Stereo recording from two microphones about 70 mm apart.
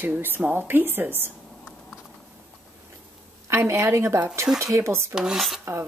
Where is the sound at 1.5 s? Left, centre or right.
Centre.